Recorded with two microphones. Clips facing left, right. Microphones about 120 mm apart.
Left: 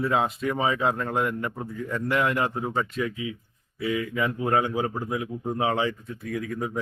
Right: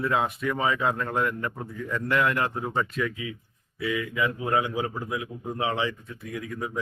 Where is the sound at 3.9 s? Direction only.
35° left (ahead or behind).